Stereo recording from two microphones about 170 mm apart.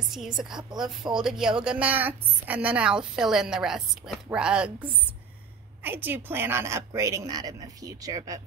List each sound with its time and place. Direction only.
0.1 s a woman's voice: centre (ahead or behind)
5.8 s a woman's voice: 10° right (ahead or behind)